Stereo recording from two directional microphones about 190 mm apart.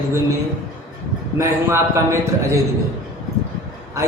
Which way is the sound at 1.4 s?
15° right (ahead or behind).